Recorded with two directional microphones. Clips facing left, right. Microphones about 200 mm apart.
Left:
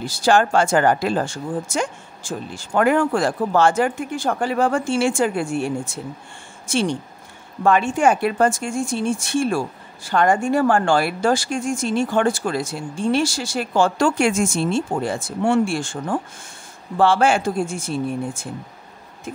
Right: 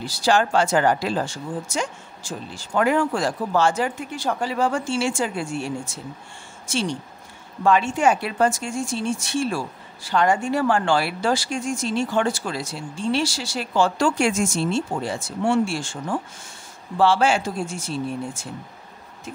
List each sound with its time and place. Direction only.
0.0 s speech: 50° left (ahead or behind)
6.7 s speech: 55° left (ahead or behind)